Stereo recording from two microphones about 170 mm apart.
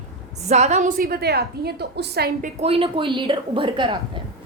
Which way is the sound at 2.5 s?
35° right (ahead or behind).